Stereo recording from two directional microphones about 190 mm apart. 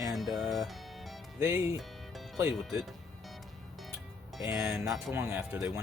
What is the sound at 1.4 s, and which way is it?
Speech, 10° right (ahead or behind).